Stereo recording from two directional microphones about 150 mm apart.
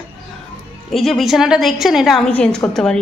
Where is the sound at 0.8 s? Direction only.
Centre (ahead or behind).